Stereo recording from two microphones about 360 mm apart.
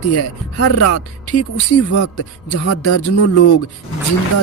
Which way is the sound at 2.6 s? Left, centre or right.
Left.